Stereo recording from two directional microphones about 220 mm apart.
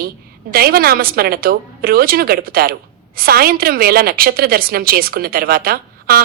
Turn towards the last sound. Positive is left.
turn(degrees=-45)  # may be behind; listen again after turning